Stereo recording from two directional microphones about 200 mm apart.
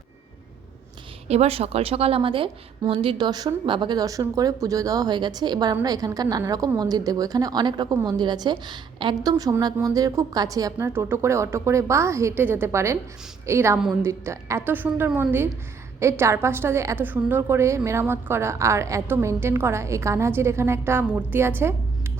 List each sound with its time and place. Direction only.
1.3 s a woman's voice: 30° right (ahead or behind); by 21.8 s 10° right (ahead or behind)